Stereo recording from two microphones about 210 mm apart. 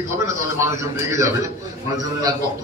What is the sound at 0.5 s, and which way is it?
A man's voice, 15° right (ahead or behind).